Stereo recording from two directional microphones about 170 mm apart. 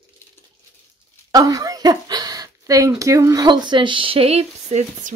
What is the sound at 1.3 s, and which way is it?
Speech, 20° right (ahead or behind).